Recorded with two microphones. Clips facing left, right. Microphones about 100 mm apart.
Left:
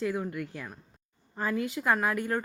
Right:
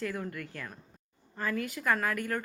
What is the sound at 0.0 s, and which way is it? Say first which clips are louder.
A woman's voice: left 5 dB; 15° left (ahead or behind).